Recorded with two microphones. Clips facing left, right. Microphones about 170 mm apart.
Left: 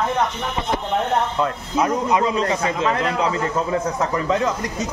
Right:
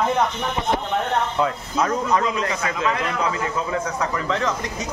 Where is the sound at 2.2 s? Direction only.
30° left (ahead or behind).